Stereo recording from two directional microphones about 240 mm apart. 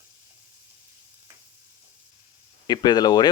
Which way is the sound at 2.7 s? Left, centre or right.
Centre.